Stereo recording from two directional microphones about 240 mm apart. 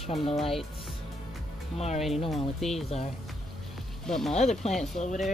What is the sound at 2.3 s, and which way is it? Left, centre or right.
Speech, centre.